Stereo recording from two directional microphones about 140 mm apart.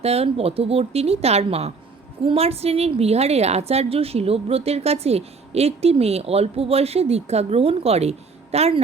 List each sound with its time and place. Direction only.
0.0 s a woman's voice: 45° right (ahead or behind)